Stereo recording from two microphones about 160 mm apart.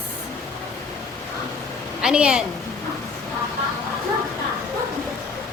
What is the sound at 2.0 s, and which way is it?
Speech, 5° right (ahead or behind).